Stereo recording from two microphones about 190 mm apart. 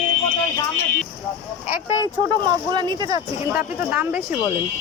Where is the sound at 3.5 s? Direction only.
10° right (ahead or behind).